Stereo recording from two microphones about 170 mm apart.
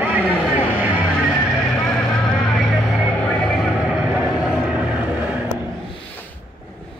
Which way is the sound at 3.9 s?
5° right (ahead or behind).